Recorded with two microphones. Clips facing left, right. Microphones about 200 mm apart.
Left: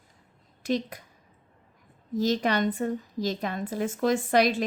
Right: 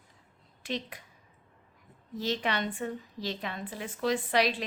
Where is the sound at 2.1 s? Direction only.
40° left (ahead or behind).